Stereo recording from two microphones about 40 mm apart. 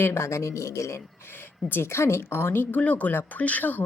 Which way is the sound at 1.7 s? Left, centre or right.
Left.